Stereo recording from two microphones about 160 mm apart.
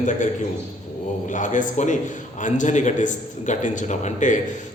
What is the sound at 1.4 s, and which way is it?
A man's voice, 50° left (ahead or behind).